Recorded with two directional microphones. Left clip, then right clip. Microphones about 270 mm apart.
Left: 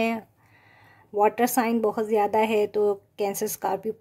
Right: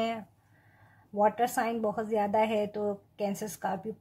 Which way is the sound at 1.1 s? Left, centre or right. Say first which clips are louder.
Left 5 dB; left.